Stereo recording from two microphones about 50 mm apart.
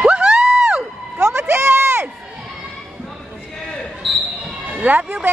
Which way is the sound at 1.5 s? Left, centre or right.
Right.